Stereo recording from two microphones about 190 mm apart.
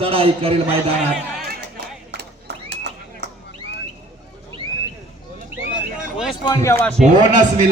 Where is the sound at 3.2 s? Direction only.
65° right (ahead or behind).